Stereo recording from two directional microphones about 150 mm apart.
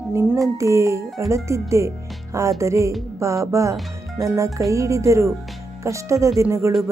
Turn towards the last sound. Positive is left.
turn(degrees=-20)  # may be behind; listen again after turning